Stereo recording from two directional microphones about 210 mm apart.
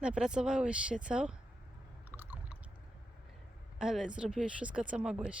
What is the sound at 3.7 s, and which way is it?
Speech, centre (ahead or behind).